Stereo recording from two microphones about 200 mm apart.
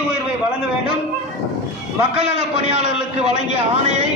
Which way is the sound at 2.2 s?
30° right (ahead or behind).